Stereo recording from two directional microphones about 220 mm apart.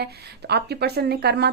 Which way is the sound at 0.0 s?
45° right (ahead or behind).